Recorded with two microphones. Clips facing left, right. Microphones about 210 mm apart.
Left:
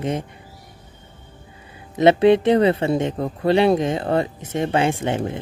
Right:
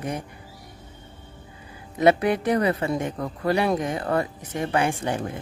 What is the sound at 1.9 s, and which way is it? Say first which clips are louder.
Speech: left 6 dB; 25° left (ahead or behind).